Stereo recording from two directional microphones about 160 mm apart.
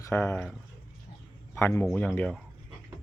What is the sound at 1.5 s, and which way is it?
Speech, 15° left (ahead or behind).